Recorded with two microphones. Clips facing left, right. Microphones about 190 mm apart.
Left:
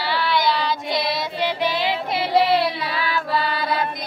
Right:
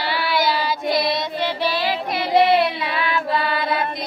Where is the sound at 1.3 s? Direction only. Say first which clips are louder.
Even; 15° left (ahead or behind).